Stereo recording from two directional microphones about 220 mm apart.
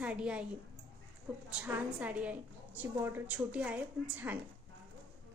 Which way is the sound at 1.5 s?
5° right (ahead or behind).